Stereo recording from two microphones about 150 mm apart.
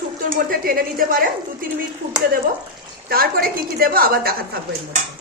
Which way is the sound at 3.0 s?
85° right.